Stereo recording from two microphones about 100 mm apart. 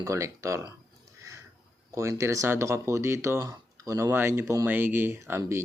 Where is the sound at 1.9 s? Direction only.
30° right (ahead or behind).